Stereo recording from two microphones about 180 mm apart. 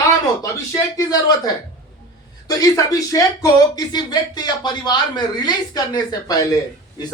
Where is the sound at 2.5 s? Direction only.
20° left (ahead or behind).